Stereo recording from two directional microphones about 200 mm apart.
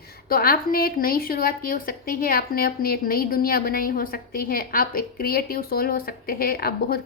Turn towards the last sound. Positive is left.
turn(degrees=50)  # may be behind; listen again after turning